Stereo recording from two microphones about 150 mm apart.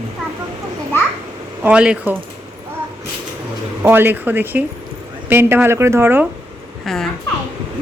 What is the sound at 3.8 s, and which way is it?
Speech, 15° right (ahead or behind).